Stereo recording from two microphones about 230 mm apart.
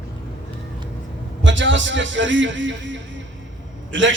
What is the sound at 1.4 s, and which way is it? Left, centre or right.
A man's voice, right.